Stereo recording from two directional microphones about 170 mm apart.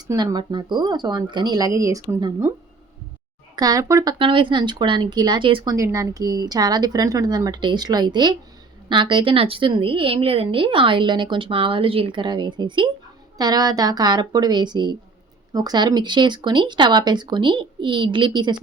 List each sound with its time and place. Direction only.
0.1 s a woman's voice: 20° right (ahead or behind)
3.5 s a woman's voice: 20° right (ahead or behind)
4.2 s a woman's voice: 30° right (ahead or behind)
5.7 s a woman's voice: 20° right (ahead or behind)